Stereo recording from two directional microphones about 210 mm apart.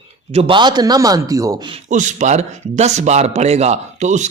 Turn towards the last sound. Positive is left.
turn(degrees=-35)  # may be behind; listen again after turning